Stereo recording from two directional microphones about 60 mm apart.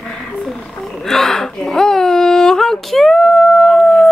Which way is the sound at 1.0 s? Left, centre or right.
Centre.